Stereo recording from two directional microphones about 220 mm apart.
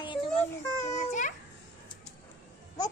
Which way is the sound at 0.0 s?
20° left (ahead or behind).